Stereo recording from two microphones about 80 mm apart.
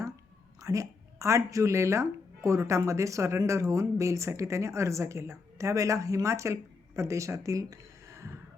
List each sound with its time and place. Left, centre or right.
0.6 s speech: right